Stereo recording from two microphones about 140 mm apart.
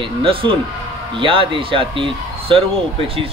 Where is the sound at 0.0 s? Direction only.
40° right (ahead or behind).